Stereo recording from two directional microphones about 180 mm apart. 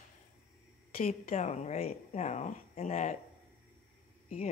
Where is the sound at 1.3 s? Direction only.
40° left (ahead or behind).